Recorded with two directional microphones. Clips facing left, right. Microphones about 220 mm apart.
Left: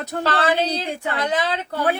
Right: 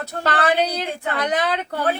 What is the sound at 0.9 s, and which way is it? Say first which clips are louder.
Speech: even; 15° left (ahead or behind).